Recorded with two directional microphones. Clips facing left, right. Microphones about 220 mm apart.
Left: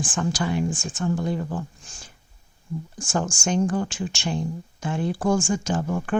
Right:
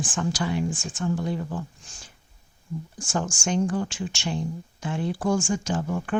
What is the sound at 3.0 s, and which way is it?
Speech, 50° left (ahead or behind).